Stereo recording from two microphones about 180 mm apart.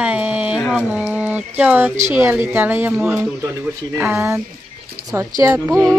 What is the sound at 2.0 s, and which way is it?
Speech, 10° right (ahead or behind).